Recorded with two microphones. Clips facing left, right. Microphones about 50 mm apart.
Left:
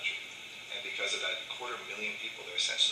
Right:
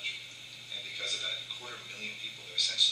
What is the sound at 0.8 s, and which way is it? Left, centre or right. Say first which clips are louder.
A man's voice: left 4 dB; left.